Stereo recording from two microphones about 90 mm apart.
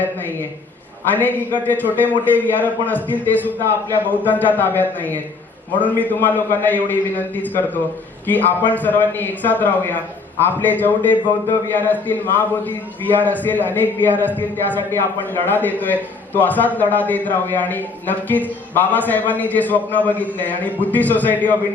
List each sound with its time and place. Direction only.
1.1 s a man's voice: 20° left (ahead or behind)